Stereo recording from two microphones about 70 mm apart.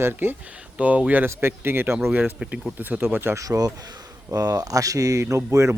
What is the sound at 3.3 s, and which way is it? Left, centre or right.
Speech, right.